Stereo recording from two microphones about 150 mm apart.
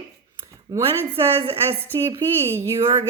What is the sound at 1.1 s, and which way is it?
Speech, 40° right (ahead or behind).